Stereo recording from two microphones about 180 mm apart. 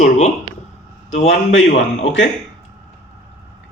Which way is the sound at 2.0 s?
90° left.